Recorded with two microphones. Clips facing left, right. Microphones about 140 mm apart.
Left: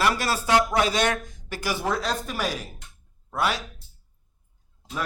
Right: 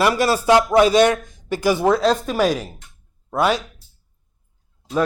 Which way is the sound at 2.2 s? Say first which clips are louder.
Right 10 dB; 90° right.